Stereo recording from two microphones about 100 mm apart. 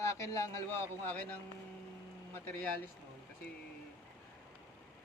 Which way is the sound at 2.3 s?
15° left (ahead or behind).